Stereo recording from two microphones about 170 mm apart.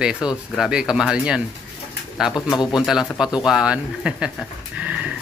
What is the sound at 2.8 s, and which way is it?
Speech, 5° right (ahead or behind).